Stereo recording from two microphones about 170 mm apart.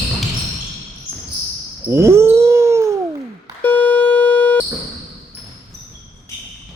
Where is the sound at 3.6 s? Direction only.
10° left (ahead or behind).